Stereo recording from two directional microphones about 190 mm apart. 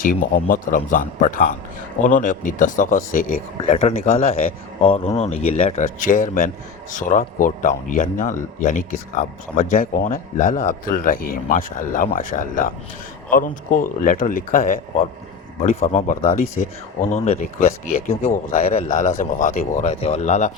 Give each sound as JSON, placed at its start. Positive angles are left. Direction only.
{"t": 0.0, "sound": "speech", "side_deg": 45}
{"t": 18.2, "sound": "speech", "side_deg": 35}